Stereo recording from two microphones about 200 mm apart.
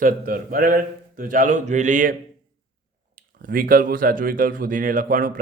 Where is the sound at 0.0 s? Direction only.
45° right (ahead or behind).